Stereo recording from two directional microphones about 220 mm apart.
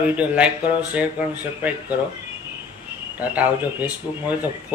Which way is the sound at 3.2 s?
5° right (ahead or behind).